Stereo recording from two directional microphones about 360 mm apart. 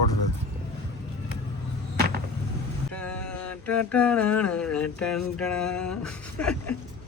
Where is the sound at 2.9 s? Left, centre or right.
Centre.